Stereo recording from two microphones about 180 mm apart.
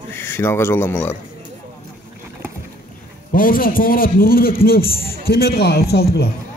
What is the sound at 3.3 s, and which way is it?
A man's voice, 50° left (ahead or behind).